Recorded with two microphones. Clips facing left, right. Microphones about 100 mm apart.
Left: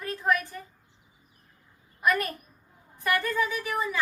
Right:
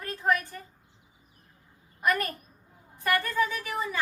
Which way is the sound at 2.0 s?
40° right (ahead or behind).